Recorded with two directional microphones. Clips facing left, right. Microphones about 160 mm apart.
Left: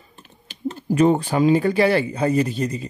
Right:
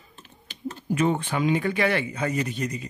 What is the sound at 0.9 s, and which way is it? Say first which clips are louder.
Speech: left 7 dB; 35° left (ahead or behind).